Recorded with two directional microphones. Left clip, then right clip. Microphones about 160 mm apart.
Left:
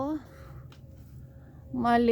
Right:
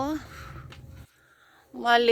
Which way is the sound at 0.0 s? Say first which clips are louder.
Right 3 dB; 20° left (ahead or behind).